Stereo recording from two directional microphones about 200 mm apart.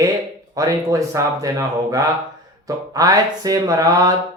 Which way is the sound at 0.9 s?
15° right (ahead or behind).